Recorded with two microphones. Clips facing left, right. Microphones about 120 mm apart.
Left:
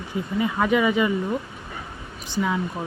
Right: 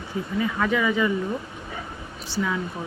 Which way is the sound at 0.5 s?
20° left (ahead or behind).